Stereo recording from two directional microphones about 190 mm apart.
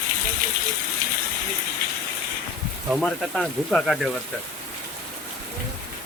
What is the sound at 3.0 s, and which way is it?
Speech, centre (ahead or behind).